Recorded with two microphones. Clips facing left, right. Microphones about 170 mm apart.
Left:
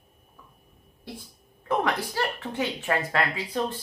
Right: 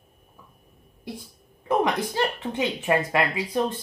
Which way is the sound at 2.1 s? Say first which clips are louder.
Right 3 dB; 20° right (ahead or behind).